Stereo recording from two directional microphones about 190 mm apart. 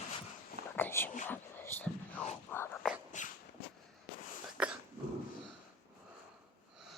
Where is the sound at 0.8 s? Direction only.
10° left (ahead or behind).